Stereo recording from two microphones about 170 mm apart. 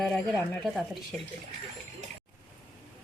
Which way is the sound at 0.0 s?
Centre (ahead or behind).